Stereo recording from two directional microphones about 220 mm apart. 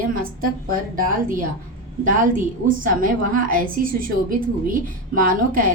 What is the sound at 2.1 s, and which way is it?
A woman's voice, 40° right (ahead or behind).